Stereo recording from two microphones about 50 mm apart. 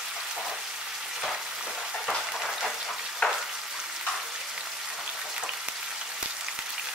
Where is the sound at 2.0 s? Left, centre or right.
Centre.